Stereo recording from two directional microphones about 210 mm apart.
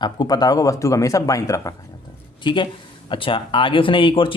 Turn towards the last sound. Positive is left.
turn(degrees=25)  # may be behind; listen again after turning